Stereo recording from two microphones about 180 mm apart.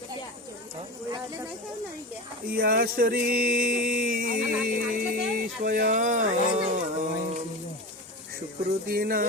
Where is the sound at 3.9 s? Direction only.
50° right (ahead or behind).